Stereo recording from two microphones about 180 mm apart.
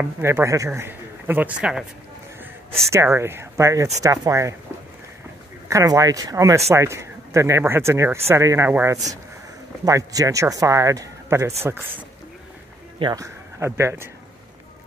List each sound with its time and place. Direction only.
0.0 s a man's voice: 15° right (ahead or behind)
2.9 s a man's voice: 15° right (ahead or behind)
5.7 s a man's voice: 20° right (ahead or behind)
13.0 s speech: 20° right (ahead or behind)